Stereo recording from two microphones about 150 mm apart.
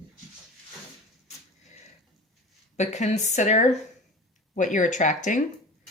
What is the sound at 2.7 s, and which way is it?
Speech, 50° left (ahead or behind).